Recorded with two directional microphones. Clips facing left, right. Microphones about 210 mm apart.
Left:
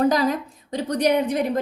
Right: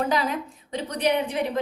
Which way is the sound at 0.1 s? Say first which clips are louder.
Left 4 dB; 40° left (ahead or behind).